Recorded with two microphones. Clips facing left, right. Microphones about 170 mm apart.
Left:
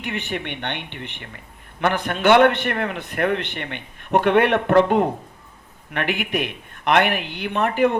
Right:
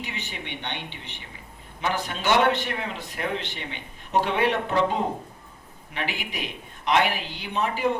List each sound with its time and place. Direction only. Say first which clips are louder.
0.0 s a man's voice: left 8 dB; 60° left (ahead or behind)